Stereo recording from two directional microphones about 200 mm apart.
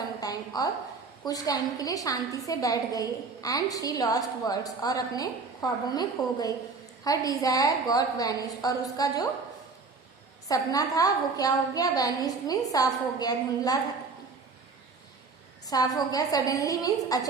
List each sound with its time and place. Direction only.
0.2 s a woman's voice: 20° left (ahead or behind)
10.5 s a woman's voice: 15° left (ahead or behind)
15.6 s a woman's voice: 20° left (ahead or behind)